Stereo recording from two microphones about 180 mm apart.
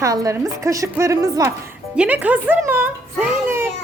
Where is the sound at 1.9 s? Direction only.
5° right (ahead or behind).